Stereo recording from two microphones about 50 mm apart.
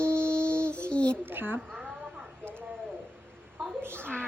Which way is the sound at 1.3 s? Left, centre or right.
Right.